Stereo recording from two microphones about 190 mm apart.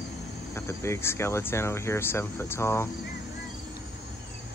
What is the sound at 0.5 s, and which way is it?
Speech, 15° left (ahead or behind).